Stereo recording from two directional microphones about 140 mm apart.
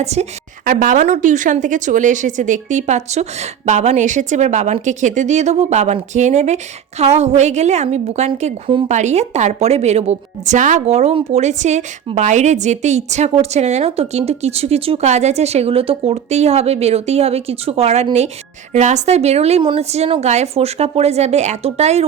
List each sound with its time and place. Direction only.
0.0 s speech: 50° right (ahead or behind)
0.6 s a woman's voice: 80° right; by 22.0 s 50° right (ahead or behind)